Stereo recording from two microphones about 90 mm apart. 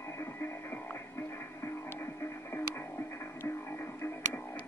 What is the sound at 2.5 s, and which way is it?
Music, 25° left (ahead or behind).